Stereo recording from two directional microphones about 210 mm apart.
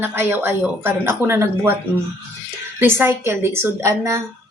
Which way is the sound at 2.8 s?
10° right (ahead or behind).